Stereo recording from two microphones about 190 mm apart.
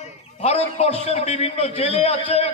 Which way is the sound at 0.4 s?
35° left (ahead or behind).